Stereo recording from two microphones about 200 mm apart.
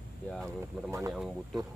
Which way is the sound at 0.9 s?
15° right (ahead or behind).